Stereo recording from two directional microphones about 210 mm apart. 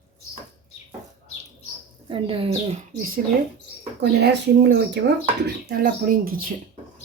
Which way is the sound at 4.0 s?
50° right (ahead or behind).